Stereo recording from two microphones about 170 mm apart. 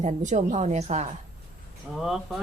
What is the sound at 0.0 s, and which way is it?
Speech, 45° right (ahead or behind).